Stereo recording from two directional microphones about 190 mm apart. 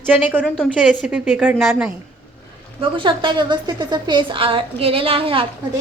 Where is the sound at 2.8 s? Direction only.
25° right (ahead or behind).